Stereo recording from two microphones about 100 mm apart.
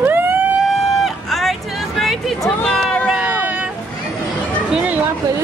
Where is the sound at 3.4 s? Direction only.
10° right (ahead or behind).